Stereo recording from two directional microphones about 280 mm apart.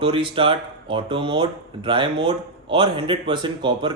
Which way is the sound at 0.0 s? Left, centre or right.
Centre.